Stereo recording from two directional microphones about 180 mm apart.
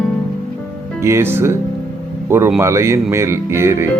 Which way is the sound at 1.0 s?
15° right (ahead or behind).